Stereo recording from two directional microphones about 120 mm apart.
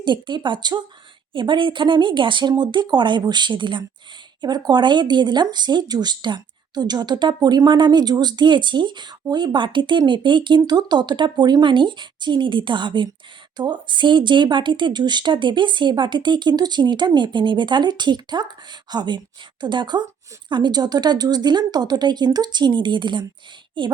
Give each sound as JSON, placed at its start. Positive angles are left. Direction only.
{"t": 0.0, "sound": "speech", "side_deg": -40}